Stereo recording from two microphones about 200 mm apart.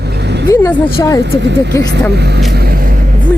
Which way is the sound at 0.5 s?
15° left (ahead or behind).